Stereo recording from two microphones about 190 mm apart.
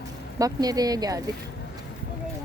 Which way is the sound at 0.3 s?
20° right (ahead or behind).